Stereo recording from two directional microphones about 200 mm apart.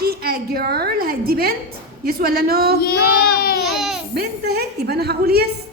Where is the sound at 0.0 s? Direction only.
50° right (ahead or behind).